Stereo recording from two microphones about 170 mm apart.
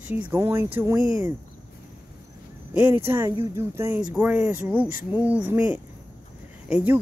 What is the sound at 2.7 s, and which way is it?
Speech, 10° right (ahead or behind).